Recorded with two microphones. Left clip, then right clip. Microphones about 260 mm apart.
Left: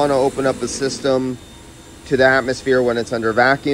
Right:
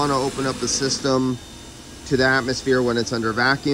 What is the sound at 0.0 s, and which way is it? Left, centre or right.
Speech, centre.